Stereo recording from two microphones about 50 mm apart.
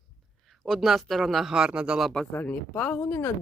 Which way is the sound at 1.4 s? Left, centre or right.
Centre.